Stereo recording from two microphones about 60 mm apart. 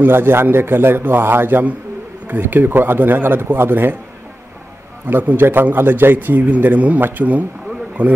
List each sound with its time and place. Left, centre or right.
0.0 s a man's voice: right
5.0 s a man's voice: right